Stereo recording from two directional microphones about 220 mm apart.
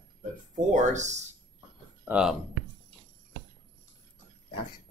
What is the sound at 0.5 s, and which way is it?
Speech, 35° right (ahead or behind).